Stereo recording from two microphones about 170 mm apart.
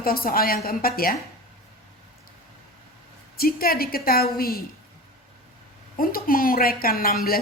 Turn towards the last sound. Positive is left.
turn(degrees=60)  # may be behind; listen again after turning